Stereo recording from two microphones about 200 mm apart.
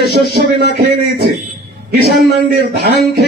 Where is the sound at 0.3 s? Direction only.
55° right (ahead or behind).